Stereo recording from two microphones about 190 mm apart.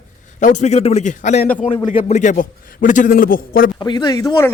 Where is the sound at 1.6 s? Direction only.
25° left (ahead or behind); by 3.7 s 50° left (ahead or behind).